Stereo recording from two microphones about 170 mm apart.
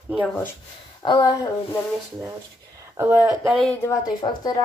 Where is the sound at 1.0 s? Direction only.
25° left (ahead or behind).